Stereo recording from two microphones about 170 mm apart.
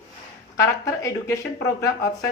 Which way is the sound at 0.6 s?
20° left (ahead or behind).